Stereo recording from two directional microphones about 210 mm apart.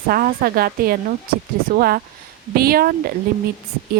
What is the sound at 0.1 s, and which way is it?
Speech, 45° right (ahead or behind).